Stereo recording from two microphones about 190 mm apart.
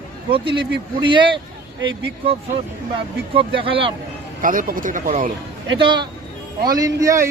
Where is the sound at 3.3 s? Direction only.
30° right (ahead or behind).